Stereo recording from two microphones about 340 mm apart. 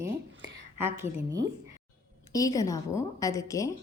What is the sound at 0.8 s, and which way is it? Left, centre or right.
Speech, centre.